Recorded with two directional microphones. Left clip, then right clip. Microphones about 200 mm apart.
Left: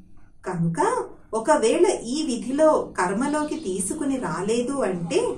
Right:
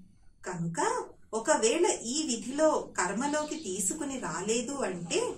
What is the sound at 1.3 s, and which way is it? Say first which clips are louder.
A woman's voice: left 7 dB; 20° right (ahead or behind).